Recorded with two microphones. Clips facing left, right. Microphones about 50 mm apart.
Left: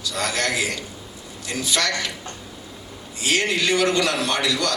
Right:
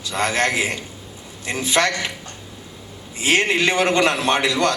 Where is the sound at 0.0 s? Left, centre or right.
Right.